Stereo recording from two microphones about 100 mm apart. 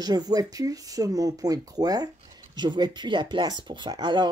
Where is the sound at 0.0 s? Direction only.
40° right (ahead or behind).